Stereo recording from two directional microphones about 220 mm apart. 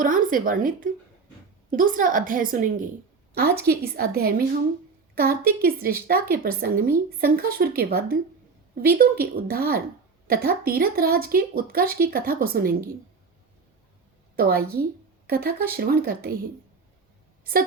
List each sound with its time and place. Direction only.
0.0 s a woman's voice: 40° right (ahead or behind)
14.3 s a woman's voice: 45° right (ahead or behind)